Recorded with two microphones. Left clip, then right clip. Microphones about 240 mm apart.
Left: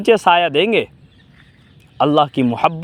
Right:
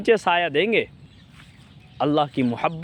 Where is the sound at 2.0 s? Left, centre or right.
Left.